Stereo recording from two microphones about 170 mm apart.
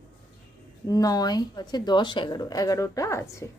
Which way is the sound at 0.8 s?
20° left (ahead or behind).